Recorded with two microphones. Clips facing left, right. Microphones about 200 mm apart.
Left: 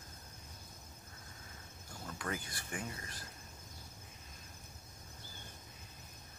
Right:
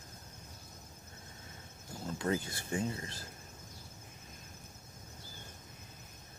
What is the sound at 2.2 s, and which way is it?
Speech, 25° right (ahead or behind).